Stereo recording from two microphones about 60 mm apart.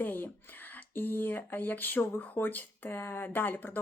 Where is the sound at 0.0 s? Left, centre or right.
Left.